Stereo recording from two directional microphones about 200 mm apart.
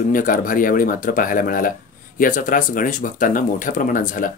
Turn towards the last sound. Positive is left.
turn(degrees=40)  # may be behind; listen again after turning